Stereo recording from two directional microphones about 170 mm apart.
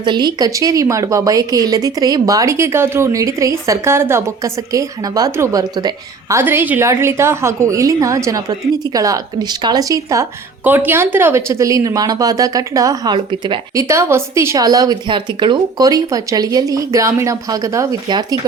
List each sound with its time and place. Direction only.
0.0 s a woman's voice: 25° right (ahead or behind)